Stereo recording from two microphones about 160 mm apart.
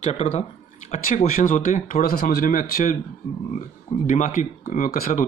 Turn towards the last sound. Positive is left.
turn(degrees=65)  # may be behind; listen again after turning